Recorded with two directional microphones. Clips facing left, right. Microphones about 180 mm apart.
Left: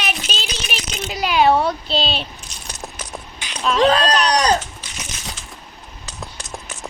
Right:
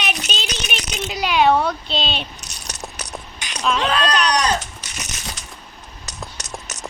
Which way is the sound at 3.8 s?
40° left (ahead or behind).